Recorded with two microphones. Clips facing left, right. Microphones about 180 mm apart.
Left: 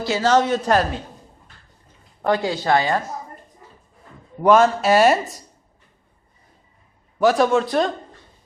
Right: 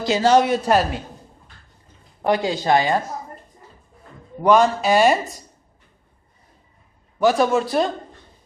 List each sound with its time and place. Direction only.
0.0 s speech: 15° right (ahead or behind)
2.2 s speech: 15° right (ahead or behind)
4.4 s speech: centre (ahead or behind)
7.2 s speech: centre (ahead or behind)